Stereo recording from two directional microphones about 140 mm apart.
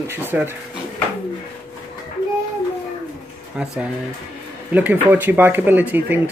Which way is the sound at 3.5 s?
5° right (ahead or behind).